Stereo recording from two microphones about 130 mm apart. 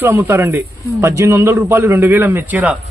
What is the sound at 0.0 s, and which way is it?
A man's voice, 20° right (ahead or behind).